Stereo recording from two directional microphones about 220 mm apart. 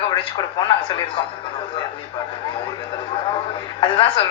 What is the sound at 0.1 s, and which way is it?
A woman's voice, 20° left (ahead or behind).